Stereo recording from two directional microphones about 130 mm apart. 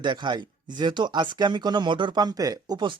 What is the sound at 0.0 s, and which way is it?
Speech, 35° right (ahead or behind).